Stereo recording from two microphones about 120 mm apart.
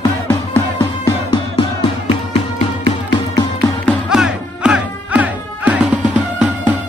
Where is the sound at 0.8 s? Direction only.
35° left (ahead or behind).